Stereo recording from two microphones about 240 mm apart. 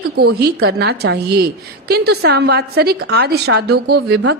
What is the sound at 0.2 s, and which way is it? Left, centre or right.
A woman's voice, right.